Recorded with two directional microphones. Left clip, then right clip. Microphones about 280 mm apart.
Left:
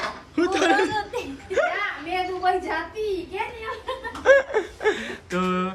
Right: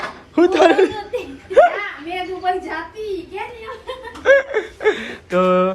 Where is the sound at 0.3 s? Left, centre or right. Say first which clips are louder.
Right 8 dB; centre.